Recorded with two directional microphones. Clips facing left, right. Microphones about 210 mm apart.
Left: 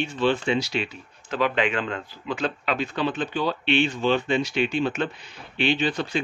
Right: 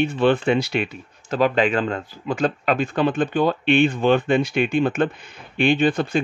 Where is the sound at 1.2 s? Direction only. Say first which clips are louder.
Right 5 dB; 40° right (ahead or behind).